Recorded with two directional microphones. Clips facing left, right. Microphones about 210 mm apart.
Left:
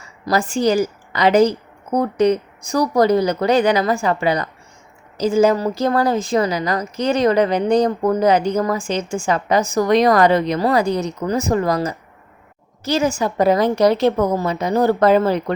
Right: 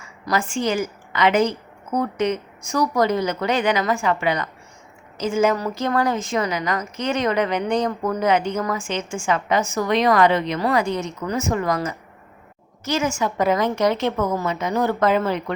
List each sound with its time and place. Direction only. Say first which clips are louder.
0.0 s a woman's voice: left 4 dB; 35° left (ahead or behind)